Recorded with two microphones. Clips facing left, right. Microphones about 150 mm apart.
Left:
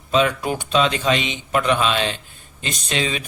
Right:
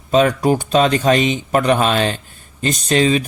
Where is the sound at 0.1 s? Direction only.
40° right (ahead or behind).